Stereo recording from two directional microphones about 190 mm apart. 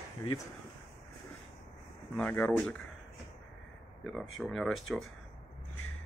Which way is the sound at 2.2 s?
10° left (ahead or behind).